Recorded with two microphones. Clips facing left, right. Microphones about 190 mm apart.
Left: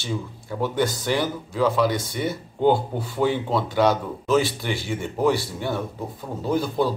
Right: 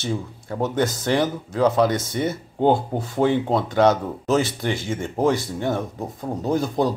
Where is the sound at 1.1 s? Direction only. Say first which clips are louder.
Right 4 dB; 55° right (ahead or behind).